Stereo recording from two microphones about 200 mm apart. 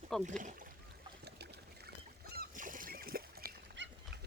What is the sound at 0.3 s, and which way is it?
Speech, 40° right (ahead or behind).